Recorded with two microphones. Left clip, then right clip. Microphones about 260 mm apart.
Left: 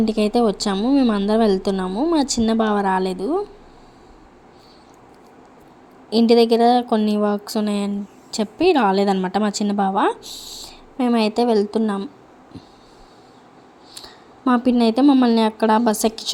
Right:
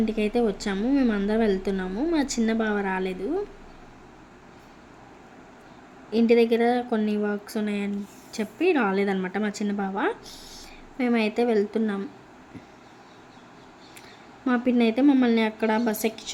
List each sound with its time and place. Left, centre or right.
0.0 s speech: left
6.1 s speech: left
14.7 s speech: left